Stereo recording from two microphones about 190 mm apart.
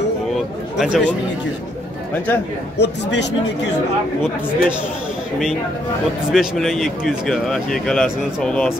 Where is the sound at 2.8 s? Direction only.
65° left (ahead or behind).